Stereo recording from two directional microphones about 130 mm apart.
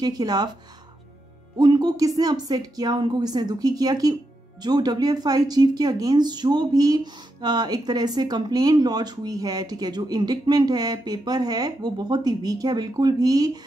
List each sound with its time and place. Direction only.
0.0 s speech: 30° right (ahead or behind)
1.6 s speech: 30° right (ahead or behind)